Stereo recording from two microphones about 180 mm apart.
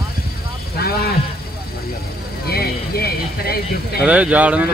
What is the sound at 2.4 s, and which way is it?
Vehicle, 60° left (ahead or behind).